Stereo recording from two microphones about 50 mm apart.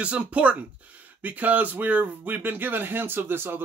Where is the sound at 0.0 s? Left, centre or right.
Right.